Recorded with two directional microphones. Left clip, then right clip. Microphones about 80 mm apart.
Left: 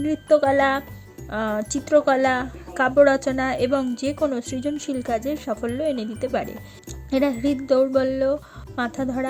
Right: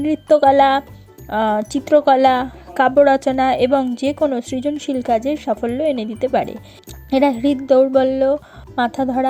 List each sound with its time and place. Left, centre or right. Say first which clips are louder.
0.0 s a woman's voice: right 5 dB; right